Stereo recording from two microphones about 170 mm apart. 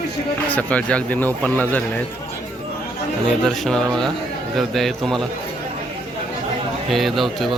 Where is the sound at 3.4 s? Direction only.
Centre (ahead or behind).